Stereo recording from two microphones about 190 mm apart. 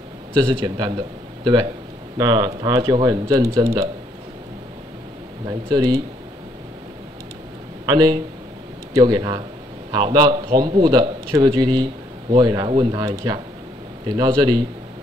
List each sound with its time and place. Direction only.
0.4 s a man's voice: 20° right (ahead or behind)
5.5 s a man's voice: 20° right (ahead or behind)
7.8 s a man's voice: 20° right (ahead or behind)